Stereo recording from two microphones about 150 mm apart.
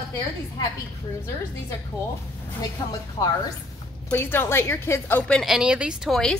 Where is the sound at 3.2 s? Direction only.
30° left (ahead or behind).